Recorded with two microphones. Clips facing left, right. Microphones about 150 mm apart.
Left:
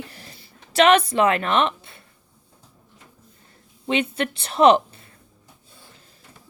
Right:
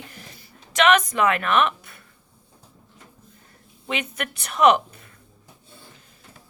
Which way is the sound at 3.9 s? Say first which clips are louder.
Left 6 dB; 30° left (ahead or behind).